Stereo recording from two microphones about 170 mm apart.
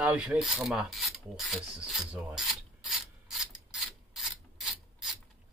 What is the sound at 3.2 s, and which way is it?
Ratchet, 5° right (ahead or behind).